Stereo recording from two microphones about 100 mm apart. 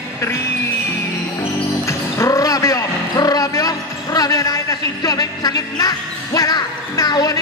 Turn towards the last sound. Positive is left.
turn(degrees=40)  # may be behind; listen again after turning